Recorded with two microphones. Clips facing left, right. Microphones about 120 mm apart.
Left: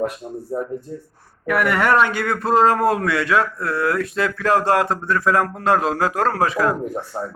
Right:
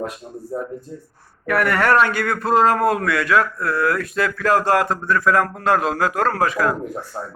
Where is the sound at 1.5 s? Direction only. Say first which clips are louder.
Even; 15° left (ahead or behind).